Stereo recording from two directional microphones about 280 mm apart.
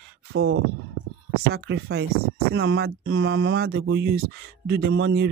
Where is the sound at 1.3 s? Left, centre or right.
Right.